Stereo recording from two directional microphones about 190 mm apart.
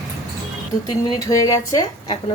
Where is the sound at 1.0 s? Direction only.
15° left (ahead or behind).